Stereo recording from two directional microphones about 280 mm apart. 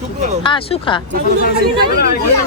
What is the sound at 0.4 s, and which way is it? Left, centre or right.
Speech, centre.